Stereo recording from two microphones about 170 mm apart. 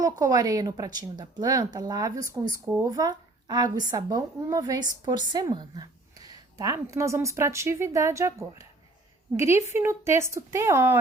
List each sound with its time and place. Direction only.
0.0 s speech: 20° right (ahead or behind)